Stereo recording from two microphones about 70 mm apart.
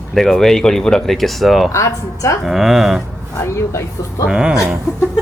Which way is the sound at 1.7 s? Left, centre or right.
Left.